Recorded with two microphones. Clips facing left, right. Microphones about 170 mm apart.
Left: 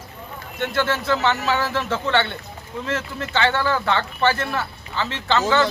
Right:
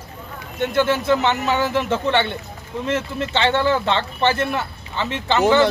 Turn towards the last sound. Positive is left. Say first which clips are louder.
# right 1 dB
turn(degrees=-15)  # may be behind; listen again after turning